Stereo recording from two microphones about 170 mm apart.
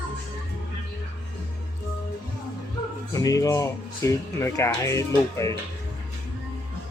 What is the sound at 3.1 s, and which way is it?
Speech, 20° left (ahead or behind).